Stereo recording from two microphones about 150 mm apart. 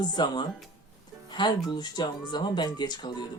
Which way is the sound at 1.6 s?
30° left (ahead or behind).